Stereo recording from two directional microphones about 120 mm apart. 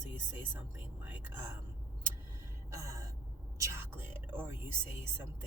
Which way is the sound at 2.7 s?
25° right (ahead or behind).